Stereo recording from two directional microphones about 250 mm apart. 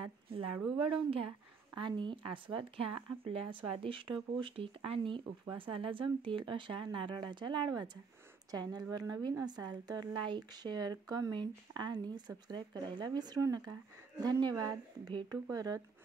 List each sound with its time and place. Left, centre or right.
0.8 s a woman's voice: right